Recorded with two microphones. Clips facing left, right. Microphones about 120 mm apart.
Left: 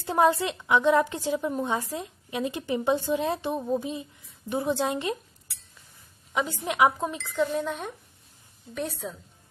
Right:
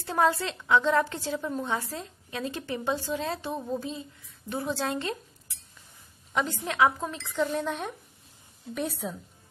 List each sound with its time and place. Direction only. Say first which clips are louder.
0.0 s a woman's voice: left 3 dB; 20° left (ahead or behind)
6.3 s a woman's voice: left 1 dB; 15° left (ahead or behind)
7.2 s speech: left 1 dB; centre (ahead or behind)